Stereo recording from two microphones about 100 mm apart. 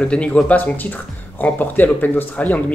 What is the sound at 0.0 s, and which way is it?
Speech, 10° left (ahead or behind).